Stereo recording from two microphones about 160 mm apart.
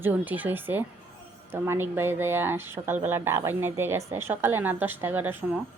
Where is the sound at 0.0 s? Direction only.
10° right (ahead or behind).